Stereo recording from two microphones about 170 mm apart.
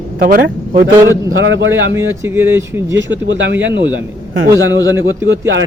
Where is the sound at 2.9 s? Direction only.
90° right.